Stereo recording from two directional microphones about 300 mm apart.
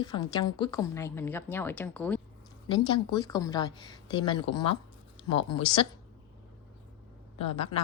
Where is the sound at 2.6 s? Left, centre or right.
Centre.